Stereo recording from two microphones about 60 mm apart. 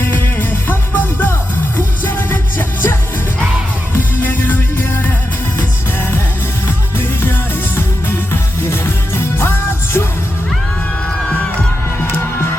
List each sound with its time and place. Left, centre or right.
0.0 s music: left
3.9 s music: left
7.8 s music: left